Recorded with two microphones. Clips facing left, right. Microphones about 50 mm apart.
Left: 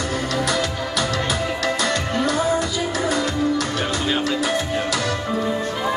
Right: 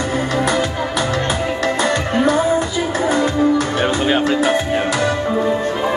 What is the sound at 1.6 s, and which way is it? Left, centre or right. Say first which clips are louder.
Music: right 5 dB; right.